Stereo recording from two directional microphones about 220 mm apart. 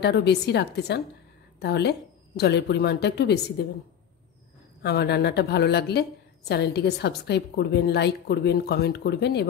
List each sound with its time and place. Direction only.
0.0 s a woman's voice: 50° left (ahead or behind)
4.8 s a woman's voice: 50° left (ahead or behind)